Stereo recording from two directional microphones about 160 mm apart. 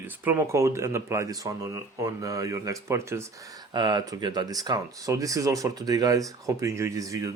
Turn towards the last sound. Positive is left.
turn(degrees=-20)  # may be behind; listen again after turning